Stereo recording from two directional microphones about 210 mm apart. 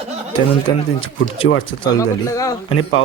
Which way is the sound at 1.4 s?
70° left (ahead or behind).